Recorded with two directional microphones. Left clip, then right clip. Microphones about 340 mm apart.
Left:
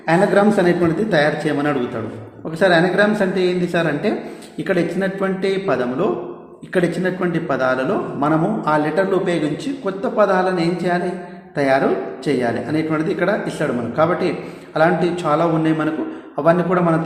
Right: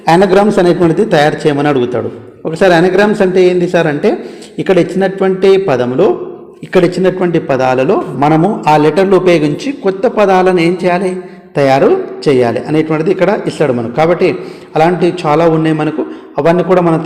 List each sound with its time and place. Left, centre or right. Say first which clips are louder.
0.0 s a man's voice: right 7 dB; right